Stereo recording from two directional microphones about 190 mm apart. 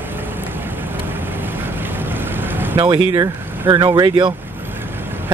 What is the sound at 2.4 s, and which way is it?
Vehicle, 10° right (ahead or behind).